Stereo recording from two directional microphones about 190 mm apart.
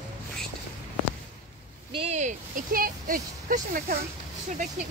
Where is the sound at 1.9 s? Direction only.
35° right (ahead or behind).